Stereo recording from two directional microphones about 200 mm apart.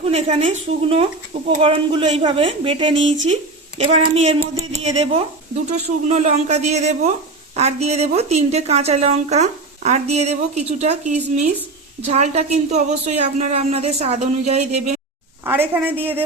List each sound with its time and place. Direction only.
0.0 s a woman's voice: 30° right (ahead or behind)
15.4 s a woman's voice: 10° right (ahead or behind)